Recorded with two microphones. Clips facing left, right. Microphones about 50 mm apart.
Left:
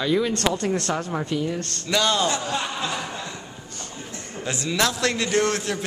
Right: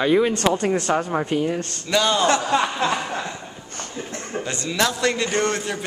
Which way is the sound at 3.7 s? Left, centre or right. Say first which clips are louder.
Right 6 dB; right.